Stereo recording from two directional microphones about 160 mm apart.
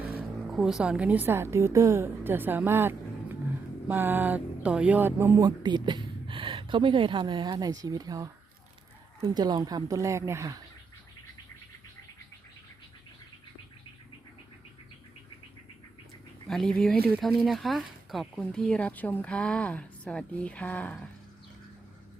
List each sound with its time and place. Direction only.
0.2 s a woman's voice: 5° right (ahead or behind)
16.5 s speech: 5° left (ahead or behind)